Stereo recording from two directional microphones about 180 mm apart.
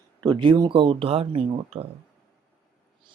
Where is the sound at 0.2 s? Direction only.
25° right (ahead or behind).